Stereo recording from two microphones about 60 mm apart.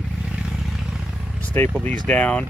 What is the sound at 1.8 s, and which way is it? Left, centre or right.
Speech, left.